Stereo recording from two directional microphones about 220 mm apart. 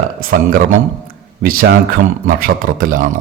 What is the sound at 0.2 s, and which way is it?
A man's voice, 40° right (ahead or behind).